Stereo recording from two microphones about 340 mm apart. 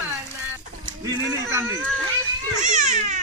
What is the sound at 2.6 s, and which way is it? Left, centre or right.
Crying, right.